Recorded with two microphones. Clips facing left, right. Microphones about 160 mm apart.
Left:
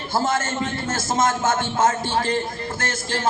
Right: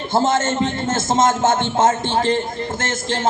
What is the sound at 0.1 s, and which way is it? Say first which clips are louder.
Speech: right 5 dB; 25° right (ahead or behind).